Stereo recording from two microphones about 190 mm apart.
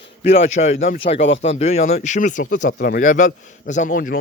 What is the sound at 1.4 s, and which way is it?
Speech, 35° left (ahead or behind).